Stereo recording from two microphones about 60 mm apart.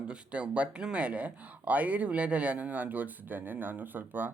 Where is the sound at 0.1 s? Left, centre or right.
Centre.